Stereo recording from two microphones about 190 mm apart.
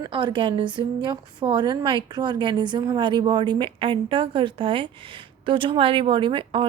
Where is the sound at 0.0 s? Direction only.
25° right (ahead or behind).